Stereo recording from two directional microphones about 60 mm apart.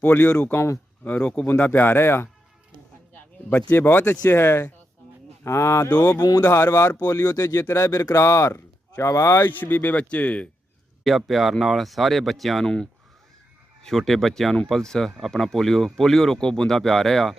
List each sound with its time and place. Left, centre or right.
0.0 s speech: left
0.5 s speech: left
1.0 s speech: left
1.5 s speech: left
4.3 s speech: left
5.5 s speech: left
6.1 s speech: left
7.0 s speech: left
9.4 s speech: left
11.0 s speech: centre
12.6 s speech: centre